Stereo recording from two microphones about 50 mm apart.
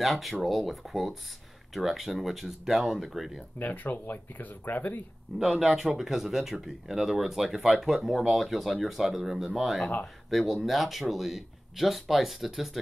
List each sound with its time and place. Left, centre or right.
0.0 s speech: centre
3.5 s speech: left
5.4 s speech: centre